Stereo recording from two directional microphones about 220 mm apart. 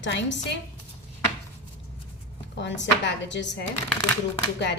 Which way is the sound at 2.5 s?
55° left (ahead or behind).